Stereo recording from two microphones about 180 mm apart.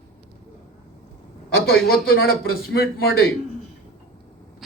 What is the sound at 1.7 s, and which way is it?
Speech, 60° left (ahead or behind).